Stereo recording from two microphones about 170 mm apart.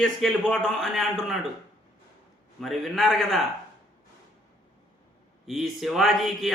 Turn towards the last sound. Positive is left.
turn(degrees=0)  # may be behind; listen again after turning